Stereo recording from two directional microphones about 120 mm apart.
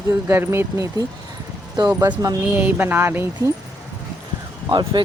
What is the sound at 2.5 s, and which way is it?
Speech, 15° right (ahead or behind).